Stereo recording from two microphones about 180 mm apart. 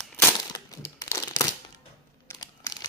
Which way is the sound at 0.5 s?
20° left (ahead or behind).